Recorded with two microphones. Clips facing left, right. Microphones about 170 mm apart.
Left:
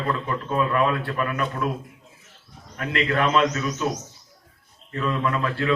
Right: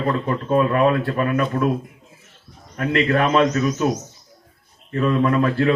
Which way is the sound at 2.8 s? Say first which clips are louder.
Right 5 dB; 30° right (ahead or behind).